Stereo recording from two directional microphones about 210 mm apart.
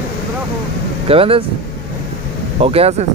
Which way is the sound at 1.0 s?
25° right (ahead or behind).